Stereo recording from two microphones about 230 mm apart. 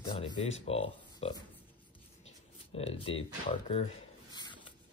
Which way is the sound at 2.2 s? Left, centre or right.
Left.